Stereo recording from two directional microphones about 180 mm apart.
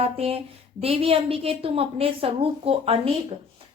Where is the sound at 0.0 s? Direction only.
35° right (ahead or behind).